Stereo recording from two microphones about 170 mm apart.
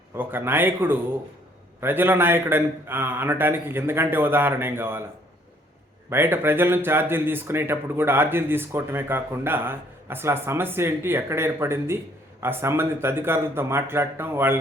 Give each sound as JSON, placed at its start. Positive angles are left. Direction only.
{"t": 0.2, "sound": "speech", "side_deg": -10}
{"t": 6.1, "sound": "speech", "side_deg": -15}